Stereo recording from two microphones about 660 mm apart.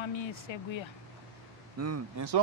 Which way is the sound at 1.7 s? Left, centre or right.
Right.